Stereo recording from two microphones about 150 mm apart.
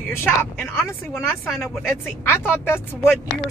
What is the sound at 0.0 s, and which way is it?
Speech, 15° left (ahead or behind).